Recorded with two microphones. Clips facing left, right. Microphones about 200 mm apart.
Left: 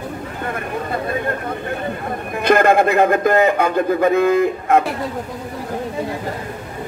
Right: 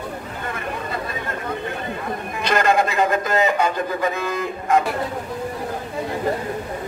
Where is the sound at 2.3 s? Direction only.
55° left (ahead or behind).